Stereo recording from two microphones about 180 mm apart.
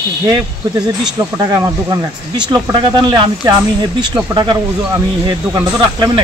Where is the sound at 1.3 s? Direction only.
20° right (ahead or behind).